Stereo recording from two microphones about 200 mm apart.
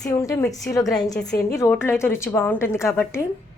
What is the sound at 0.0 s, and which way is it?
A woman's voice, 15° left (ahead or behind).